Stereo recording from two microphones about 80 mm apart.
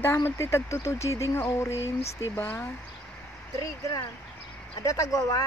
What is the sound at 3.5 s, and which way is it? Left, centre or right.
Speech, left.